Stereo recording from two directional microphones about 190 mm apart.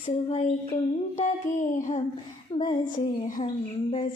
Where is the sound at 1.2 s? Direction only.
40° left (ahead or behind).